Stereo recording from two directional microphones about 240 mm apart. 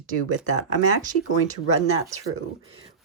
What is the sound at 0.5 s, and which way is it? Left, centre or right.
Speech, right.